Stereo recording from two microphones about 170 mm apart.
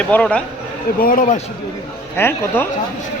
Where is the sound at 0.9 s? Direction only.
55° left (ahead or behind).